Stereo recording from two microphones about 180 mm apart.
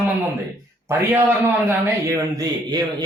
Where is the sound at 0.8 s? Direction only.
10° right (ahead or behind).